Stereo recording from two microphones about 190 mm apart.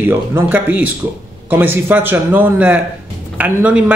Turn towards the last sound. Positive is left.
turn(degrees=-5)  # may be behind; listen again after turning